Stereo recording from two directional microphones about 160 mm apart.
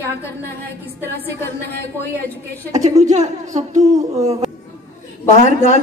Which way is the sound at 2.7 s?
45° right (ahead or behind).